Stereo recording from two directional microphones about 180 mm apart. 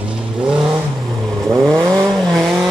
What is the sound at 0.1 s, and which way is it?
Vehicle, 5° right (ahead or behind).